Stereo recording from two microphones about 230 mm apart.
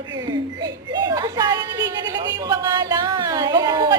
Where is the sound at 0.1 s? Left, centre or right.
Centre.